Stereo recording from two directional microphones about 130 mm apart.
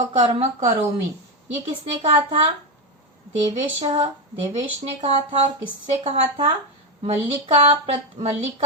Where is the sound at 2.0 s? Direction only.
45° right (ahead or behind).